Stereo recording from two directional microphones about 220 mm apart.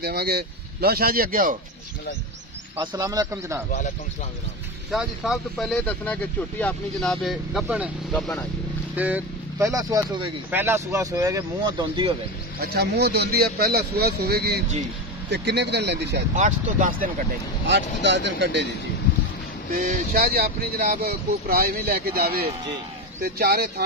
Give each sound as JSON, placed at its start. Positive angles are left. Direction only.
{"t": 0.0, "sound": "speech", "side_deg": -45}
{"t": 2.8, "sound": "speech", "side_deg": -15}
{"t": 4.9, "sound": "speech", "side_deg": 0}
{"t": 12.7, "sound": "speech", "side_deg": -45}
{"t": 16.3, "sound": "speech", "side_deg": -35}
{"t": 17.6, "sound": "speech", "side_deg": -55}
{"t": 19.7, "sound": "speech", "side_deg": -40}